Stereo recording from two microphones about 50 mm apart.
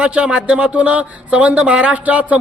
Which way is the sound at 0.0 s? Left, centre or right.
Right.